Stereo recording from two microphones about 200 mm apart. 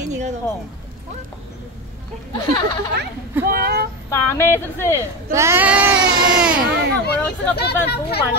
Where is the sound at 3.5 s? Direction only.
50° right (ahead or behind).